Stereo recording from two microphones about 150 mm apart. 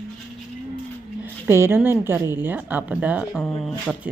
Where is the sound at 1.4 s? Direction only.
15° right (ahead or behind).